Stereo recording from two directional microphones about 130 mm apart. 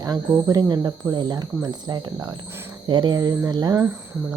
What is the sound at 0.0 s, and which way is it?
Speech, 30° right (ahead or behind).